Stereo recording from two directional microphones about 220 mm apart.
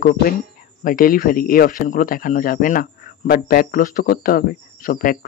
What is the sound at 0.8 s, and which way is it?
Speech, 40° left (ahead or behind).